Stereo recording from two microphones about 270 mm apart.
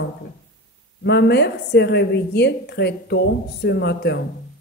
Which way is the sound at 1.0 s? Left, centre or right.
Left.